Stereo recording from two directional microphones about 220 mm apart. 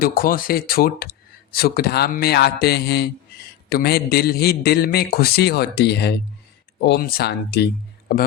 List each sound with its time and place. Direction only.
0.0 s a man's voice: 40° left (ahead or behind)